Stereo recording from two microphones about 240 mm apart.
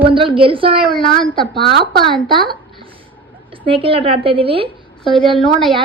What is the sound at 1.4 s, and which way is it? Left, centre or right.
Speech, left.